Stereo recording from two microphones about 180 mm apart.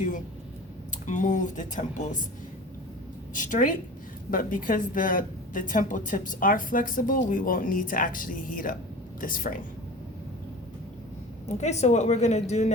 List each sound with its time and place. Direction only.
1.0 s a woman's voice: 45° left (ahead or behind)
3.3 s a woman's voice: 45° left (ahead or behind)
11.4 s a woman's voice: 40° left (ahead or behind)